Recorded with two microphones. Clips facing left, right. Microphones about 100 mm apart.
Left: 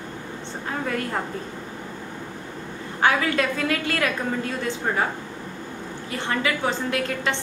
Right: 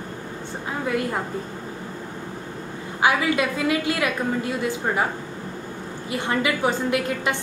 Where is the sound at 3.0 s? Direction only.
10° right (ahead or behind).